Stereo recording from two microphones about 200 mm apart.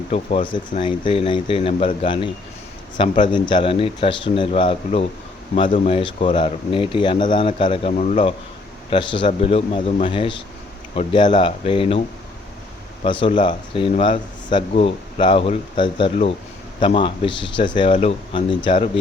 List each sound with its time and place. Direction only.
0.1 s speech: 30° left (ahead or behind)
8.9 s speech: 25° left (ahead or behind)